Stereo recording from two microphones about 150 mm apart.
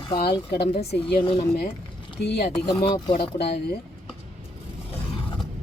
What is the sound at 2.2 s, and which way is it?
Speech, 90° left.